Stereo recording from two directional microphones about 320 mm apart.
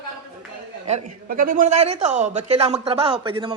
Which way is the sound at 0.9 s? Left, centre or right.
Right.